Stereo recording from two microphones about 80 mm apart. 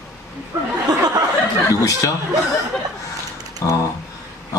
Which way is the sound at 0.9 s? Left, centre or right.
Right.